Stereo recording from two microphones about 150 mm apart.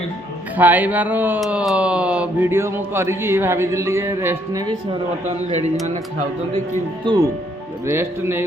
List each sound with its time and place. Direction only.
0.5 s speech: 10° right (ahead or behind)
5.5 s speech: 50° right (ahead or behind)
7.0 s speech: 30° right (ahead or behind)
7.9 s speech: 15° right (ahead or behind)